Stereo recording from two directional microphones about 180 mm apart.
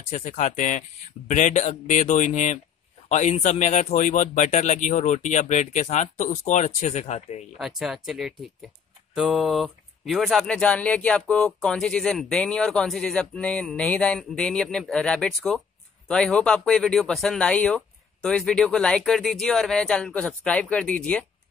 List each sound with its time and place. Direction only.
0.1 s speech: 40° left (ahead or behind)
7.5 s speech: centre (ahead or behind)